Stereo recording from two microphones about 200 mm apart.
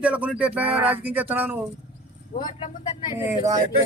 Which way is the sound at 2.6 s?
25° left (ahead or behind).